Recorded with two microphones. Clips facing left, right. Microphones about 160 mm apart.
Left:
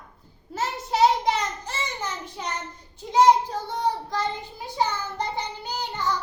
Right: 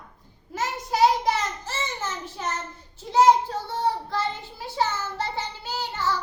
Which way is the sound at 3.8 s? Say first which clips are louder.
Even; 15° left (ahead or behind).